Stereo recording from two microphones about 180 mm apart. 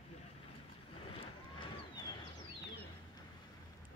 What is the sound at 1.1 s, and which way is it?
Vehicle, 30° left (ahead or behind).